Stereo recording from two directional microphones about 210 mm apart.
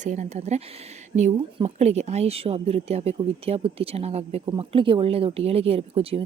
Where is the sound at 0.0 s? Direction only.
35° right (ahead or behind).